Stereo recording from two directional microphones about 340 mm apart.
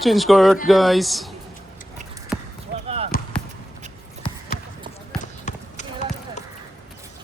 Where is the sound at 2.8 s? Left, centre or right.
Centre.